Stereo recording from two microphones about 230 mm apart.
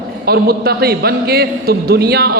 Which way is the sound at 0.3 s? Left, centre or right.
Right.